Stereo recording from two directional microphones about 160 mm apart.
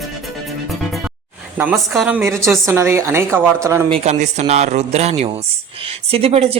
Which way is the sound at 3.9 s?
40° right (ahead or behind).